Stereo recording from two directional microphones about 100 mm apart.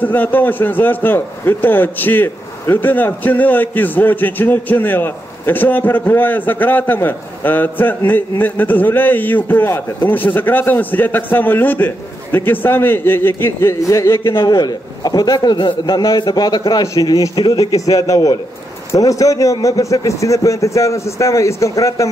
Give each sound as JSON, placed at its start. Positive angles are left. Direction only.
{"t": 0.0, "sound": "a man's voice", "side_deg": 20}
{"t": 14.4, "sound": "a man's voice", "side_deg": 45}